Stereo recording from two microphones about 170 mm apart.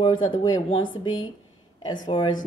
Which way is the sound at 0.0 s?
25° left (ahead or behind).